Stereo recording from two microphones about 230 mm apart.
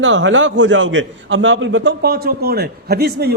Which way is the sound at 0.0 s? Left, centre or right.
Right.